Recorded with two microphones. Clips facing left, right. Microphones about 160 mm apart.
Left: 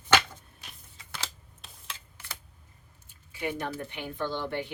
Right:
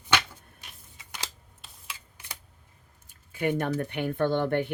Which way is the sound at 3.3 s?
50° right (ahead or behind).